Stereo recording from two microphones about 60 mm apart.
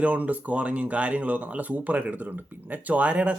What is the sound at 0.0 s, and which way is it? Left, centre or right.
Speech, right.